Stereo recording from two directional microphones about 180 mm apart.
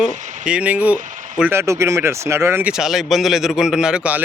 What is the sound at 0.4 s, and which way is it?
Speech, 5° right (ahead or behind).